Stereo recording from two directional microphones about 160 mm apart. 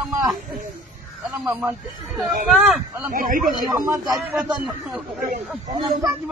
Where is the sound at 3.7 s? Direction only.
20° right (ahead or behind).